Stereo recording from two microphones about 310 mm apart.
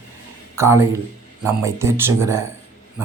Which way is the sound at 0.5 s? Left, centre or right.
Centre.